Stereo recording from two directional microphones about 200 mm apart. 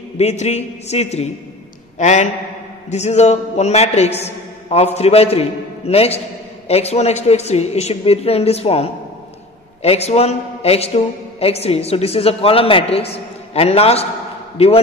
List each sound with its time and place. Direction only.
0.2 s a woman's voice: 35° left (ahead or behind)